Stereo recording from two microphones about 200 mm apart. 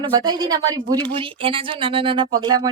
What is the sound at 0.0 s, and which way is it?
Speech, 20° right (ahead or behind).